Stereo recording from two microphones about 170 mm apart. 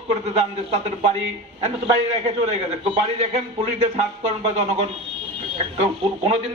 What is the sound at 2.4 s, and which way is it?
A man's voice, 40° right (ahead or behind).